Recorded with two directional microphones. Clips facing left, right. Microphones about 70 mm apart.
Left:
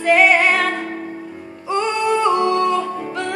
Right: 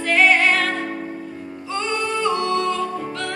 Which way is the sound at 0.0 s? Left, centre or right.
Centre.